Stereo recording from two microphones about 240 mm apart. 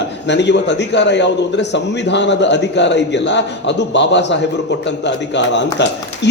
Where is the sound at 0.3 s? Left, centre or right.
Left.